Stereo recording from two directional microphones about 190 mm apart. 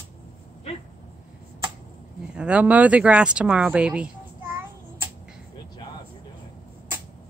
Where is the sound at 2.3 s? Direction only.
5° right (ahead or behind).